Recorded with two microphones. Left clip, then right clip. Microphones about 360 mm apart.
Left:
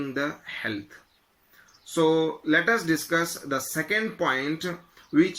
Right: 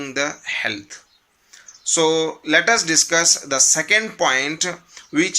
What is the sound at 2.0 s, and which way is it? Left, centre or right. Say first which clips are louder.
Speech: right 3 dB; centre.